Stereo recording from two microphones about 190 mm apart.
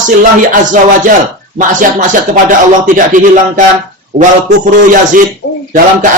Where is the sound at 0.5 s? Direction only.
45° right (ahead or behind).